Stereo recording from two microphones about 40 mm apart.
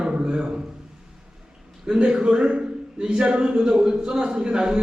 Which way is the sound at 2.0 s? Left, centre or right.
Right.